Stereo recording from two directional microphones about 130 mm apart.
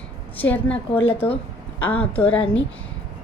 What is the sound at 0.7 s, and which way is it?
Speech, 45° left (ahead or behind).